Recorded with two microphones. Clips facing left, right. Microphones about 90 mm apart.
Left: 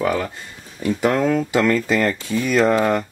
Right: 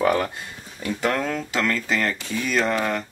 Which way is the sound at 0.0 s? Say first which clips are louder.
Even; 5° right (ahead or behind).